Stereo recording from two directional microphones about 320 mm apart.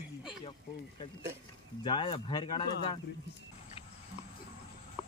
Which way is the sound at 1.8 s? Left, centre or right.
Centre.